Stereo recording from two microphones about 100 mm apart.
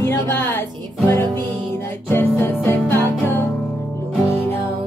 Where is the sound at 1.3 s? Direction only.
20° left (ahead or behind).